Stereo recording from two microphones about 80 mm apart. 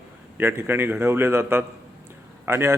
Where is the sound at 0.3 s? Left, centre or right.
Right.